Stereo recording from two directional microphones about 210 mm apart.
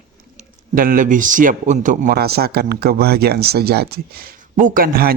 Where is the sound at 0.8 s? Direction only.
40° right (ahead or behind).